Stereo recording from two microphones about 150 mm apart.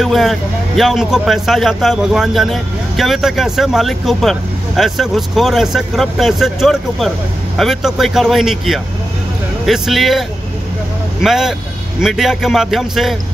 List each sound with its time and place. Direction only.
0.0 s speech: centre (ahead or behind)
11.2 s speech: 5° right (ahead or behind)